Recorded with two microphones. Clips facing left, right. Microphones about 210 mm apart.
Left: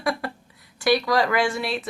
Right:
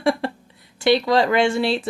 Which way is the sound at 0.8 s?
25° right (ahead or behind).